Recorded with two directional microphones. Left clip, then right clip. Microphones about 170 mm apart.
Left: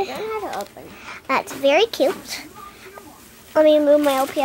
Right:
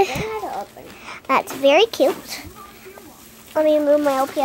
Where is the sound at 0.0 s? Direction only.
30° right (ahead or behind).